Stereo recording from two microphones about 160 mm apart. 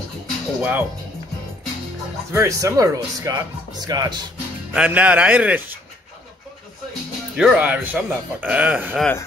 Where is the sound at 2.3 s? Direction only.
15° right (ahead or behind).